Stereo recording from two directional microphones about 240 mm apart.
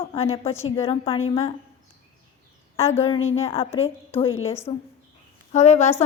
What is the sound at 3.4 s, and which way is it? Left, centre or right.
Speech, left.